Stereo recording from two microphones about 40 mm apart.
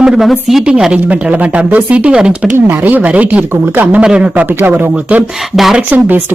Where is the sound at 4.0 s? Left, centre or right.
Right.